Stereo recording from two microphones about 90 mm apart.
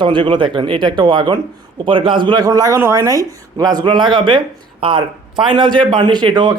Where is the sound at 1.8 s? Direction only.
75° right (ahead or behind).